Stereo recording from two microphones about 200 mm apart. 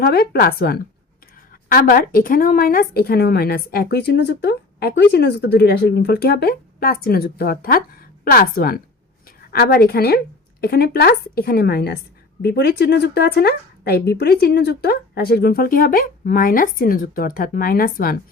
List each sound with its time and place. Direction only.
0.0 s speech: 50° left (ahead or behind)